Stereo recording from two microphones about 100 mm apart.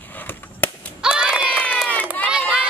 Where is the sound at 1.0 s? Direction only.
10° right (ahead or behind).